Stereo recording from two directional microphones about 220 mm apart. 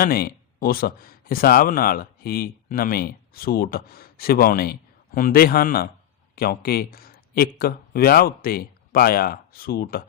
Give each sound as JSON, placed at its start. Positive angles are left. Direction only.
{"t": 0.0, "sound": "speech", "side_deg": 40}